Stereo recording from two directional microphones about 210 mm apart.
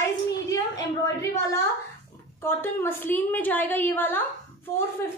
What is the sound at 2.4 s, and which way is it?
A woman's voice, 10° left (ahead or behind).